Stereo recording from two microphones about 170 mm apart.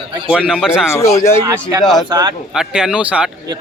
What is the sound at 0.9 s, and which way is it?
Speech, 20° left (ahead or behind).